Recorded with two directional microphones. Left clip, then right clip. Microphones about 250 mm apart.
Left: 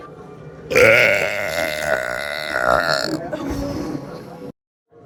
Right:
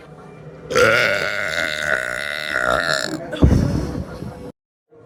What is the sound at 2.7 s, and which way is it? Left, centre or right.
Burping, right.